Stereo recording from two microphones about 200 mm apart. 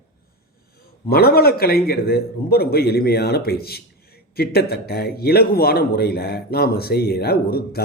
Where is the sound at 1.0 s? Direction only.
50° left (ahead or behind).